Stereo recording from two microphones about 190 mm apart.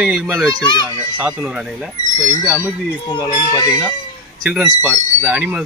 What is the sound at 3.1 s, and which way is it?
Speech, 20° left (ahead or behind).